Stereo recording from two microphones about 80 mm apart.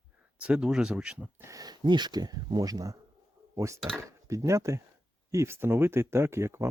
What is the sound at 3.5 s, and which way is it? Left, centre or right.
Speech, right.